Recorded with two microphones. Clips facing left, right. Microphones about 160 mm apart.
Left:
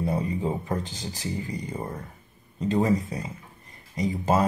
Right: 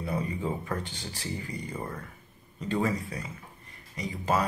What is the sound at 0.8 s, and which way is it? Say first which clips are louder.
Speech: left 4 dB; 40° left (ahead or behind).